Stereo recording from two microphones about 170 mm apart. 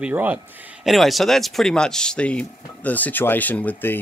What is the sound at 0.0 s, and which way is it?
Speech, 10° right (ahead or behind).